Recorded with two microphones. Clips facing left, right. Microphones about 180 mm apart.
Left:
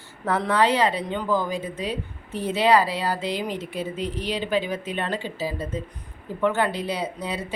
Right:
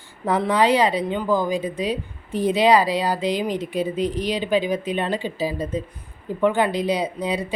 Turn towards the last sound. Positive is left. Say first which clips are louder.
# right 5 dB
turn(degrees=-15)  # may be behind; listen again after turning